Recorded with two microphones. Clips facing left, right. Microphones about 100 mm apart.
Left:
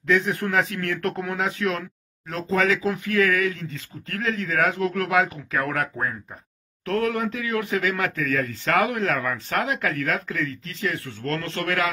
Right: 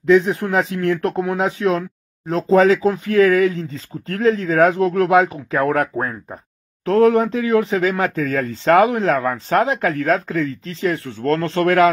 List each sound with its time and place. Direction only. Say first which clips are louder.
0.0 s speech: right 8 dB; 25° right (ahead or behind)